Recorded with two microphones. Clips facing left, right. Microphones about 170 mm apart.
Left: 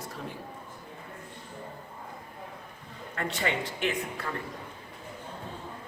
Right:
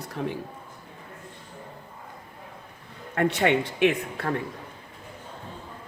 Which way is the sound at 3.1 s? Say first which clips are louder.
Right 9 dB; 65° right (ahead or behind).